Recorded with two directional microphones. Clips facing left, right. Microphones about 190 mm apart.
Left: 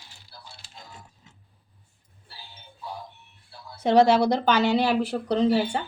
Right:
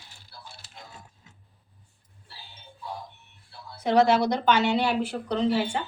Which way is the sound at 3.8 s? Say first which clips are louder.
Left 3 dB; 30° left (ahead or behind).